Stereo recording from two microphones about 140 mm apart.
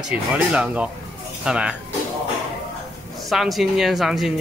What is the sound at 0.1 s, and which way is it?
Speech, 10° right (ahead or behind).